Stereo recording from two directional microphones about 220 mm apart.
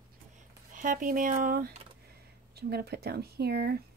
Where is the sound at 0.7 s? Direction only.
35° right (ahead or behind).